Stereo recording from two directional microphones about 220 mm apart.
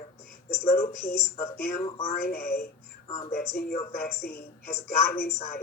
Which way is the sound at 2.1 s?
45° left (ahead or behind).